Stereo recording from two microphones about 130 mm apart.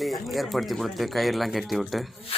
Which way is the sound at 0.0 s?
Centre (ahead or behind).